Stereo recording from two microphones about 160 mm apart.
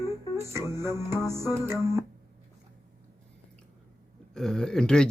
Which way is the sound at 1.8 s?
15° right (ahead or behind).